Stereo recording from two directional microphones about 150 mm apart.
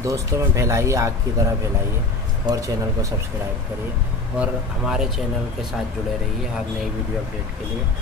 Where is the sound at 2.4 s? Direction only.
20° right (ahead or behind).